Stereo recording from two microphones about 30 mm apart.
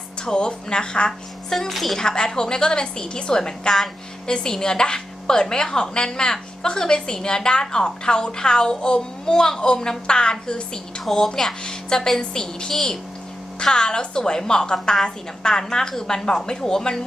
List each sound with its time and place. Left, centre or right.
0.3 s speech: left
1.5 s a woman's voice: centre
1.7 s speech: centre
2.0 s a woman's voice: left
11.1 s a woman's voice: centre